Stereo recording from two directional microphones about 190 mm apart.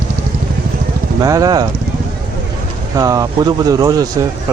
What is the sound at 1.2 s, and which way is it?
Speech, 20° right (ahead or behind).